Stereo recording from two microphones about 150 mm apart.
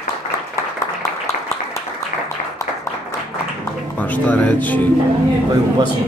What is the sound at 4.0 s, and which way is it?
Speech, 10° left (ahead or behind).